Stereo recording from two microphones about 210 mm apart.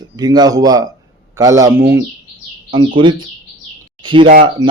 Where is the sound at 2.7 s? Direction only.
25° right (ahead or behind).